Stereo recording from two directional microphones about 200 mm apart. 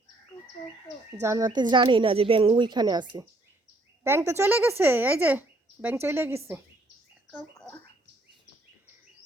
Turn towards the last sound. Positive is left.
turn(degrees=-5)  # may be behind; listen again after turning